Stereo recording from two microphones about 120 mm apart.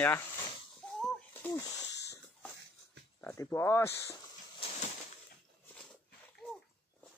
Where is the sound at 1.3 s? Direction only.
20° left (ahead or behind).